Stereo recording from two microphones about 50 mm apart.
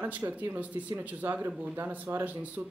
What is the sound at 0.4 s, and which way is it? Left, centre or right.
Speech, right.